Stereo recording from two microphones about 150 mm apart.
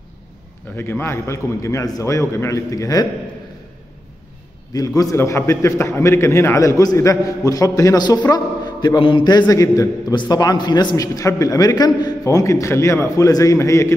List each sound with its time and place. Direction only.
0.7 s a man's voice: 15° left (ahead or behind)
4.7 s a man's voice: 25° left (ahead or behind)